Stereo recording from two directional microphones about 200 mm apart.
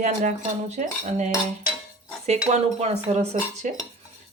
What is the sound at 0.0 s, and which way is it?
Speech, 35° right (ahead or behind).